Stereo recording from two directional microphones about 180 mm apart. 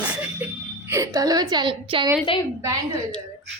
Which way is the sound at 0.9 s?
20° right (ahead or behind).